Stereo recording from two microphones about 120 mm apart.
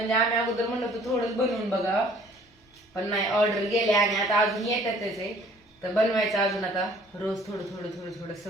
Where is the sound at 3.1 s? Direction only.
Centre (ahead or behind).